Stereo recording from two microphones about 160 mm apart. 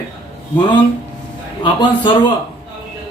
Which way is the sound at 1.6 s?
30° left (ahead or behind).